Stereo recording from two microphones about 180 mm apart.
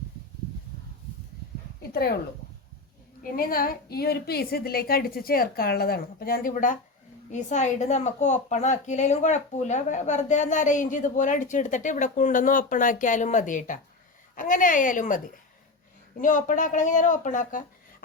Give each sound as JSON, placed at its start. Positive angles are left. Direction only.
{"t": 1.8, "sound": "speech", "side_deg": 60}
{"t": 3.3, "sound": "a woman's voice", "side_deg": 55}
{"t": 16.2, "sound": "a woman's voice", "side_deg": 45}